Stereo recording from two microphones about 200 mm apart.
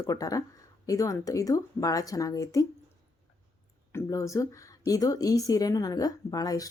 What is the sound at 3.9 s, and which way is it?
A woman's voice, 15° left (ahead or behind).